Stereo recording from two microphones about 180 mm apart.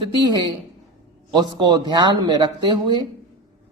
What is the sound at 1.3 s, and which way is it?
Speech, 25° right (ahead or behind).